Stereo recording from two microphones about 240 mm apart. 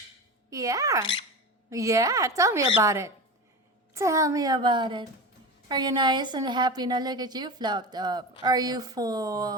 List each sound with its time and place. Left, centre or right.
0.5 s a woman's voice: centre